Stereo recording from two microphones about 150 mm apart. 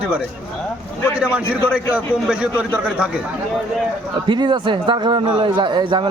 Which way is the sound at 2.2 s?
5° right (ahead or behind).